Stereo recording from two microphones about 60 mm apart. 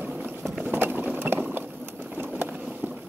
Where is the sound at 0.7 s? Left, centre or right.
Right.